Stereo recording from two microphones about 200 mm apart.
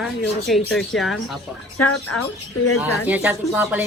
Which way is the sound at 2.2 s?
90° left.